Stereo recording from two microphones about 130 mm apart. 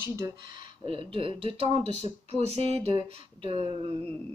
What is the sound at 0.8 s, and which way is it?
Speech, 45° right (ahead or behind).